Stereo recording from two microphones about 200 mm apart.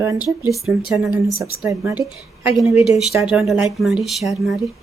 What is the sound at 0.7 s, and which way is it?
Speech, centre (ahead or behind).